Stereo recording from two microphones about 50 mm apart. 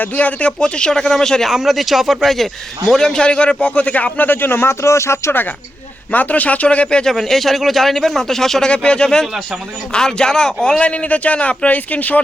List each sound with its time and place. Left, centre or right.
0.0 s a man's voice: left
0.6 s speech: centre
1.5 s a man's voice: centre; by 5.3 s left
6.1 s speech: left
7.0 s speech: centre
8.7 s a man's voice: centre